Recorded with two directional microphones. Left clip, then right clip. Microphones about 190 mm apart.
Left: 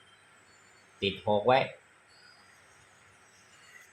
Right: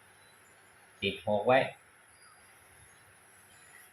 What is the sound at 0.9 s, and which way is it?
Speech, 45° left (ahead or behind).